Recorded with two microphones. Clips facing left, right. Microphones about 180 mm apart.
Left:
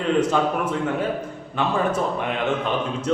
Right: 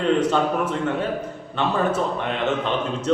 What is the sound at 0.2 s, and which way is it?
Speech, 10° left (ahead or behind).